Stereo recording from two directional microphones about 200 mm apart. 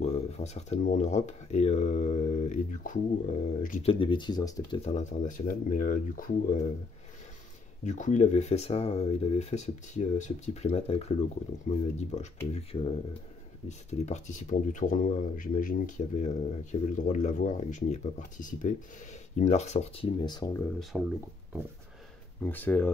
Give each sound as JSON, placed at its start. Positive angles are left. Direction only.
{"t": 0.0, "sound": "speech", "side_deg": 35}
{"t": 3.9, "sound": "speech", "side_deg": 25}
{"t": 4.7, "sound": "speech", "side_deg": 35}
{"t": 7.8, "sound": "speech", "side_deg": 35}
{"t": 20.2, "sound": "speech", "side_deg": 20}
{"t": 20.9, "sound": "speech", "side_deg": 0}
{"t": 22.4, "sound": "speech", "side_deg": 10}